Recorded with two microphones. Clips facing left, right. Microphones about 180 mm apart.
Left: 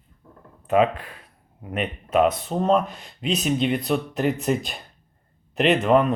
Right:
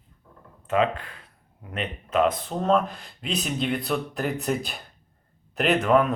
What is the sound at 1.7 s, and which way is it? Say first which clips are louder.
Speech: left 3 dB; 5° left (ahead or behind).